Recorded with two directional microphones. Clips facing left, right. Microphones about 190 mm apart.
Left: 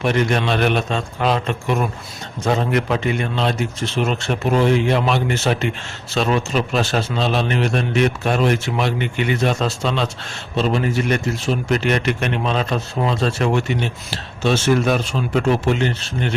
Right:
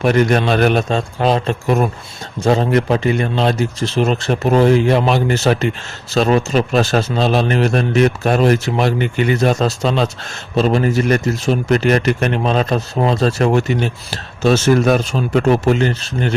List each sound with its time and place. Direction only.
0.0 s speech: 45° right (ahead or behind)